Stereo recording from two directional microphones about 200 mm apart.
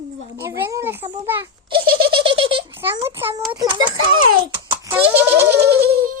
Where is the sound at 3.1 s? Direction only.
10° right (ahead or behind).